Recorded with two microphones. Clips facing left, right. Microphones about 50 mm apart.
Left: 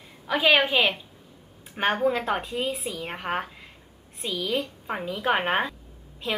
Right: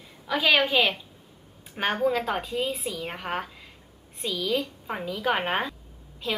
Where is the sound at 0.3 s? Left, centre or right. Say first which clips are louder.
Left 1 dB; centre.